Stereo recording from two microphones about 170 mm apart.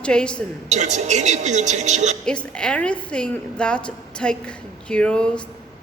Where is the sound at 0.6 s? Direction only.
45° right (ahead or behind).